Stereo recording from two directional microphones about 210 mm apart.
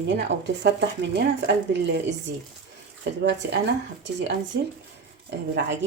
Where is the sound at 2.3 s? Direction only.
50° right (ahead or behind).